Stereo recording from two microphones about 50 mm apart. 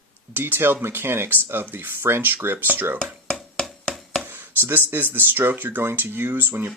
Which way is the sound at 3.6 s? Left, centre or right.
Centre.